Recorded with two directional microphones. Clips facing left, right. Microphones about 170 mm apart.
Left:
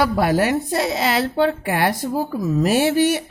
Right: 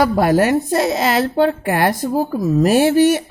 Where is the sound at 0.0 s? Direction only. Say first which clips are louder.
Right 4 dB; 45° right (ahead or behind).